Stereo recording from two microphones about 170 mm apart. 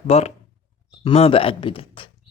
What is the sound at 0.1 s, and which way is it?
Speech, 35° left (ahead or behind).